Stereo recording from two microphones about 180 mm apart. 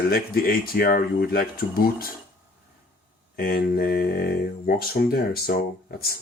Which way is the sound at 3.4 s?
60° left (ahead or behind).